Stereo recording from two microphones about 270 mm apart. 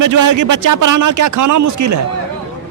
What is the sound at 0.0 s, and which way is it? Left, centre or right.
A man's voice, right.